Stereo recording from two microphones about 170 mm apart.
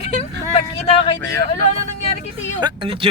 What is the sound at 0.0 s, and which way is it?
Vehicle, 40° left (ahead or behind).